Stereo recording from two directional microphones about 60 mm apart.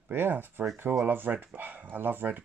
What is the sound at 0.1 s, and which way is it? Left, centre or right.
Speech, right.